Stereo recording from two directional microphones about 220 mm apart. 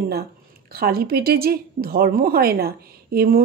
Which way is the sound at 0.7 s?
45° right (ahead or behind).